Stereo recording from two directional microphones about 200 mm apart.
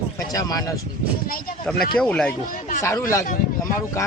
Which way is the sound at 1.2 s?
45° left (ahead or behind).